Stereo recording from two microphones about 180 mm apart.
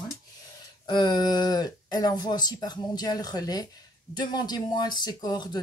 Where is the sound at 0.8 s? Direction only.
25° left (ahead or behind).